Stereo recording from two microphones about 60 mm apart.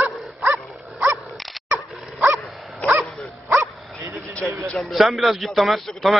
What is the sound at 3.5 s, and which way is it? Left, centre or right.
Bow-wow, right.